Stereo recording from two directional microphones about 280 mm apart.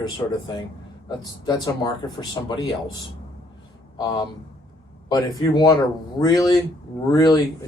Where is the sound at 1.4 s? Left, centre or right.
Centre.